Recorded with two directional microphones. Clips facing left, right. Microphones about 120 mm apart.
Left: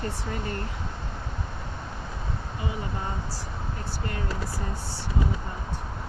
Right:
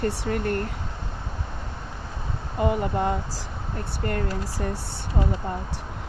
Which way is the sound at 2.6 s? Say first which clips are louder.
Right 11 dB; 60° right (ahead or behind).